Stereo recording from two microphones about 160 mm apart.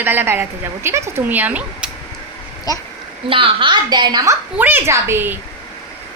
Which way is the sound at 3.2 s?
35° right (ahead or behind).